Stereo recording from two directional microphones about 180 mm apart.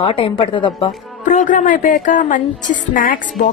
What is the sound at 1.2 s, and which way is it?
Music, 45° left (ahead or behind).